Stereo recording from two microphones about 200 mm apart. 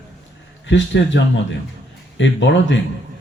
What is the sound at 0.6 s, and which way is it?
Speech, 65° left (ahead or behind).